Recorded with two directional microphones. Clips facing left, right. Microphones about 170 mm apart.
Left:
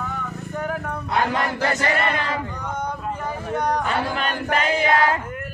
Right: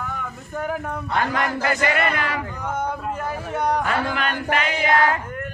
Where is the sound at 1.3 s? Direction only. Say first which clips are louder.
Even; 30° left (ahead or behind).